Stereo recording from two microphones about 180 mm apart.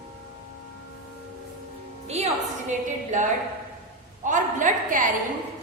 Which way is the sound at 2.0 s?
35° right (ahead or behind).